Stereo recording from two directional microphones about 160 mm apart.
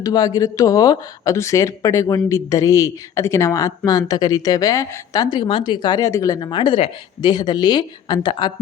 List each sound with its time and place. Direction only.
0.0 s speech: 25° left (ahead or behind)